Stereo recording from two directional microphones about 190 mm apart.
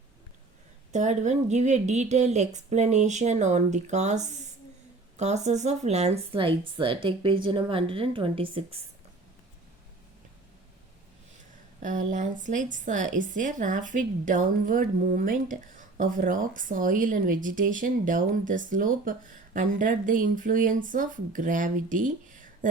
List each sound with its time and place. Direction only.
0.9 s speech: 40° right (ahead or behind)
11.8 s a woman's voice: 40° right (ahead or behind)